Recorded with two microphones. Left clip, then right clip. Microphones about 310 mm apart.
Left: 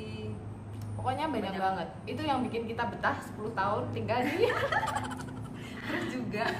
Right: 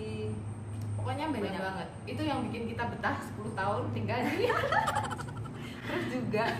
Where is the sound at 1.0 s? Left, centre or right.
Centre.